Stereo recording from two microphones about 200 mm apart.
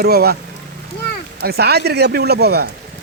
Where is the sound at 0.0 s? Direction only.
50° right (ahead or behind).